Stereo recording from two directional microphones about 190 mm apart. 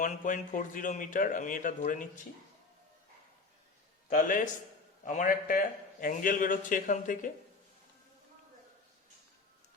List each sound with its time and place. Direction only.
0.0 s speech: 45° left (ahead or behind)
4.1 s speech: 45° left (ahead or behind)